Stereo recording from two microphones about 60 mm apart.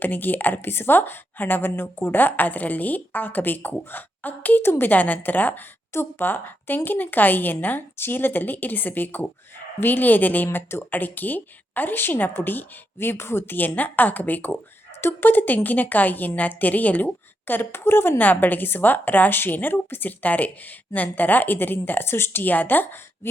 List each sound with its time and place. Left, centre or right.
0.0 s a woman's voice: left
4.6 s a woman's voice: left
4.9 s a woman's voice: left